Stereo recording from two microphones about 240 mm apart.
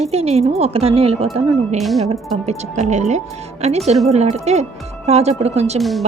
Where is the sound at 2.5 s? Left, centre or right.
Right.